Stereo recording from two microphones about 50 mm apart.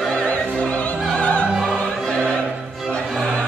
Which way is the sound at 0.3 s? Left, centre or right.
Left.